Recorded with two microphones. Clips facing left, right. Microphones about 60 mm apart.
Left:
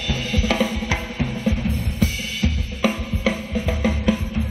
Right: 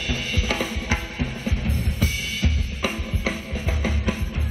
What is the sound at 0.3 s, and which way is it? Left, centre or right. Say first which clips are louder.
Drum: left 7 dB; left.